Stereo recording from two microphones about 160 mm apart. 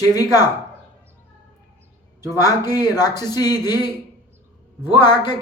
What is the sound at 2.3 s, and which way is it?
Speech, 25° left (ahead or behind).